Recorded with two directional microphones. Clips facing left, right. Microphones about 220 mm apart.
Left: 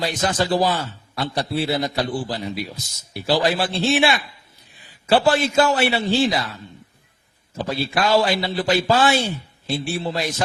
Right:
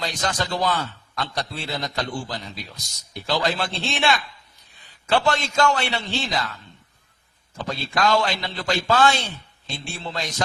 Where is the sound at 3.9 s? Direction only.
15° left (ahead or behind).